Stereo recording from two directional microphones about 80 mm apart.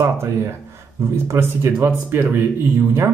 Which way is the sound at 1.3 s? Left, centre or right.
Right.